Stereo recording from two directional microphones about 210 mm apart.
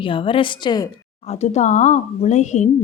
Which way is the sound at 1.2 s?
30° left (ahead or behind).